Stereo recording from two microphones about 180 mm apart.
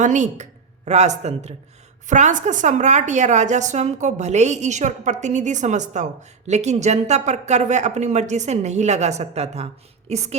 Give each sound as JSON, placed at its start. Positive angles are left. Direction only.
{"t": 0.0, "sound": "a woman's voice", "side_deg": -40}